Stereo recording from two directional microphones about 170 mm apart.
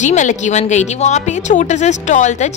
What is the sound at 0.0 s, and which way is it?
A woman's voice, 45° left (ahead or behind).